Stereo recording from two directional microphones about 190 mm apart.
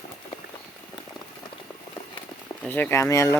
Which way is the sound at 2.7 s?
10° left (ahead or behind).